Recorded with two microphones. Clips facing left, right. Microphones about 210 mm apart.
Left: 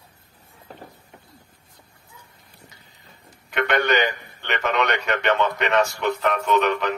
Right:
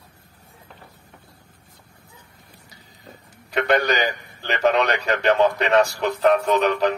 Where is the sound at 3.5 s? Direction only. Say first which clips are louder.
Right 1 dB; 35° right (ahead or behind).